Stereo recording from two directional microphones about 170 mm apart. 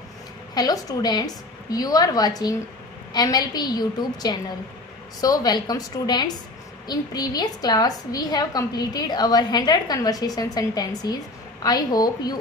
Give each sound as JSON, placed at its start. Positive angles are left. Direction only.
{"t": 0.6, "sound": "a woman's voice", "side_deg": 20}